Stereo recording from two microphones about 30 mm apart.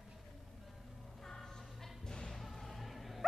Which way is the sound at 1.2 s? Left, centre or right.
Centre.